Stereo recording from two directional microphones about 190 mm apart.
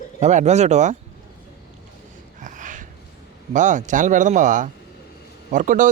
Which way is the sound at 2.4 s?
40° right (ahead or behind).